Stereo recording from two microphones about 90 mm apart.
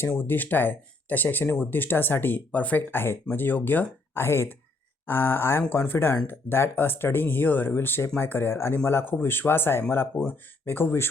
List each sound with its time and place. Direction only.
0.2 s speech: 20° left (ahead or behind)